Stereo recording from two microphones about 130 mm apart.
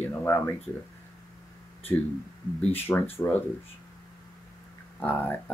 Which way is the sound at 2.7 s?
15° left (ahead or behind).